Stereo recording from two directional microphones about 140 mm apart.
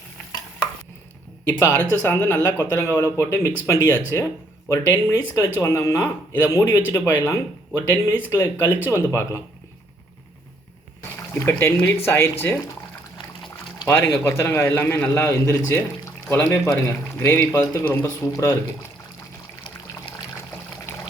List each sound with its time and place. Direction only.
1.5 s speech: 15° left (ahead or behind)
11.3 s speech: 15° left (ahead or behind)
13.8 s speech: 15° left (ahead or behind)